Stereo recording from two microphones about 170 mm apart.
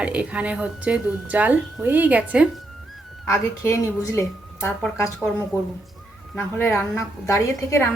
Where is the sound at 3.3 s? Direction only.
15° left (ahead or behind).